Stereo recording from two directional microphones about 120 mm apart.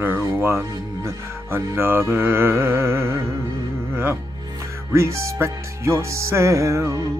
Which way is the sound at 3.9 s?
20° right (ahead or behind).